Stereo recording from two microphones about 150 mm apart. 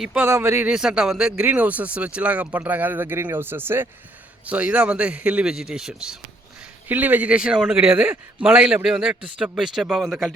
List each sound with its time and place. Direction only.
0.0 s speech: 5° right (ahead or behind)
0.3 s a man's voice: 20° right (ahead or behind)
0.7 s a man's voice: 5° right (ahead or behind)